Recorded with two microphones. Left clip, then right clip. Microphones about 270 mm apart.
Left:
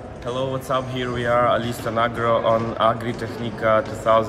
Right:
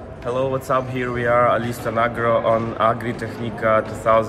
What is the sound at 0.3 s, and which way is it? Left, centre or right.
Speech, centre.